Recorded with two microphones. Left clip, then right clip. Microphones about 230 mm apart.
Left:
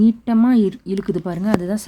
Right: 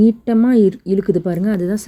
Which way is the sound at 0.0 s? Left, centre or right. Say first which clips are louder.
Right 2 dB; centre.